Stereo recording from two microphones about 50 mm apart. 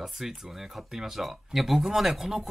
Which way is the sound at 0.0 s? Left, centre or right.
Centre.